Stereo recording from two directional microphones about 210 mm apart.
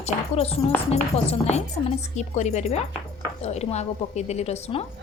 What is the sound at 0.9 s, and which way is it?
A woman's voice, 30° left (ahead or behind).